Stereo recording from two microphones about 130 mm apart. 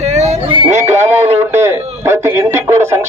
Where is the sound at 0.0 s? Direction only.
60° right (ahead or behind).